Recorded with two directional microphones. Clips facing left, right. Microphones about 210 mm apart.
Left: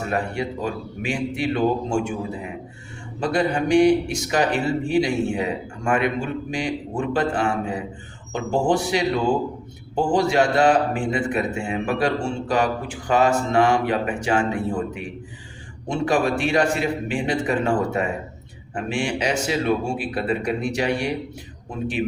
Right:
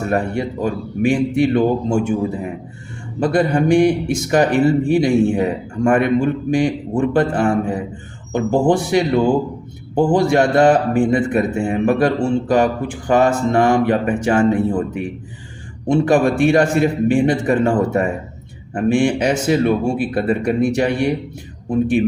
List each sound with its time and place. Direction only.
0.1 s a man's voice: 50° right (ahead or behind)
3.2 s a man's voice: 50° right (ahead or behind)
15.9 s a man's voice: 50° right (ahead or behind)